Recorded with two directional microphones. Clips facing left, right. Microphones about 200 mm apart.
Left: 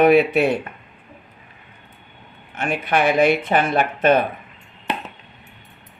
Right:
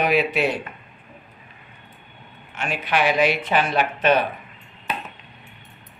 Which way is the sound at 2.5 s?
55° left (ahead or behind).